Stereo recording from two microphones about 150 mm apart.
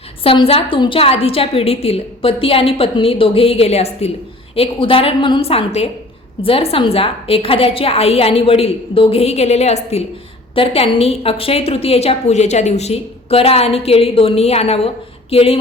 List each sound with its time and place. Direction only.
0.2 s a woman's voice: 40° left (ahead or behind)